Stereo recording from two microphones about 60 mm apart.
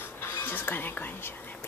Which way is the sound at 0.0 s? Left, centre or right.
Left.